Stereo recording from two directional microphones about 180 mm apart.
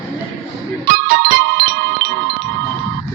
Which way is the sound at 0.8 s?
50° right (ahead or behind).